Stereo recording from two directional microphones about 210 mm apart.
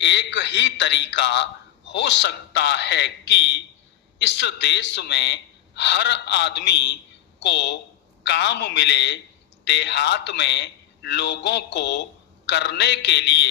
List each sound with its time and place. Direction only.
0.0 s speech: 55° left (ahead or behind)